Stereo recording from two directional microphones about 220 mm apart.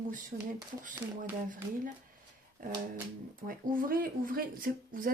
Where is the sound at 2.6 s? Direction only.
40° right (ahead or behind).